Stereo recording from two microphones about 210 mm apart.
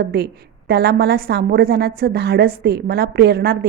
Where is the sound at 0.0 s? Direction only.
50° right (ahead or behind).